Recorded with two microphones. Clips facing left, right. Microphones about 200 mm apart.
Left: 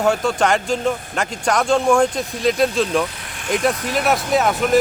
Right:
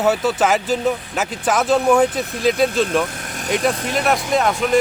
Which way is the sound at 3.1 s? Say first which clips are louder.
Right 4 dB; 45° right (ahead or behind).